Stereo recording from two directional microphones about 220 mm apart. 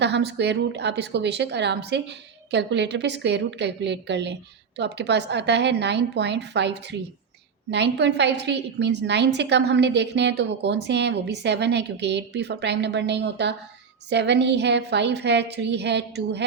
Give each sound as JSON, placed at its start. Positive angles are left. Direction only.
{"t": 0.0, "sound": "a woman's voice", "side_deg": -50}